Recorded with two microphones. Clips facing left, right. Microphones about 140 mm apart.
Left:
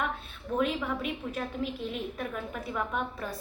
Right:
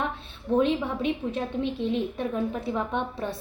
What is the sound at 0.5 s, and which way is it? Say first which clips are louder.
A woman's voice: right 6 dB; 30° right (ahead or behind).